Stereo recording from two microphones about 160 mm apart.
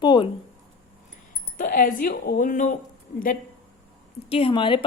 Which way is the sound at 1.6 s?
60° left (ahead or behind).